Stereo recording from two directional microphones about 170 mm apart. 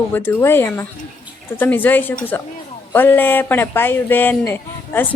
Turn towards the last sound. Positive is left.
turn(degrees=10)  # may be behind; listen again after turning